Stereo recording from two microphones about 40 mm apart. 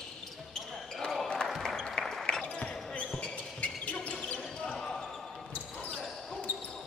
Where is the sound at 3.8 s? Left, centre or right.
Left.